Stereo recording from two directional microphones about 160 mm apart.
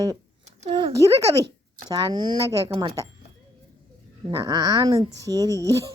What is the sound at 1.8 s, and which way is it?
Speech, 25° right (ahead or behind).